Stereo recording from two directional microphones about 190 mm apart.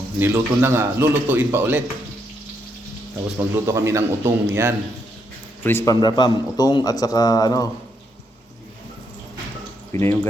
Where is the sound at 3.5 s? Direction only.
15° right (ahead or behind).